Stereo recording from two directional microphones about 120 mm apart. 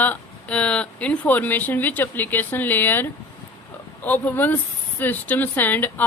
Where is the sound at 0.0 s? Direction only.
10° left (ahead or behind).